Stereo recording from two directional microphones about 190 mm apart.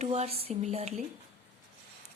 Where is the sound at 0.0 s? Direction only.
35° right (ahead or behind).